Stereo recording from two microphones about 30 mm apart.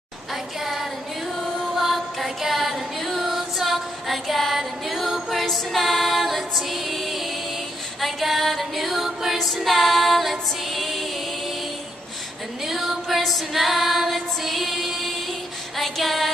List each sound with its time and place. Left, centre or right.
1.8 s music: centre
9.7 s female singing: centre
10.3 s music: centre
12.6 s a sound: centre
13.2 s female singing: centre
15.8 s female singing: centre